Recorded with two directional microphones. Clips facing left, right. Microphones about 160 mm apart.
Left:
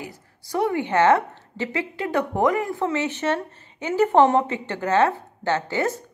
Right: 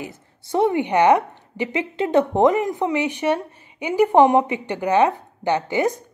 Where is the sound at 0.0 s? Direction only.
25° right (ahead or behind).